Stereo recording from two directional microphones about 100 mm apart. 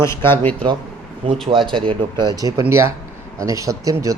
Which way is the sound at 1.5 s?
55° right (ahead or behind).